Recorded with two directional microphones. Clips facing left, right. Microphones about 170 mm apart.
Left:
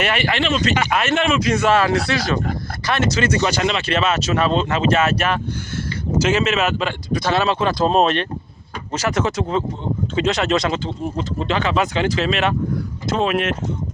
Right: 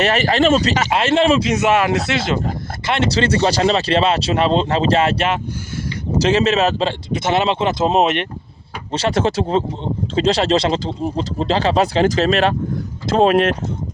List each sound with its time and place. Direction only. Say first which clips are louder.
0.0 s speech: right 5 dB; 40° right (ahead or behind)
1.5 s speech: right 1 dB; 20° right (ahead or behind)
8.9 s speech: right 3 dB; 30° right (ahead or behind)